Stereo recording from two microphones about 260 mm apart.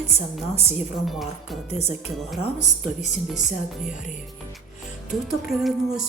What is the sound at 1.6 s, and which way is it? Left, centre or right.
Speech, left.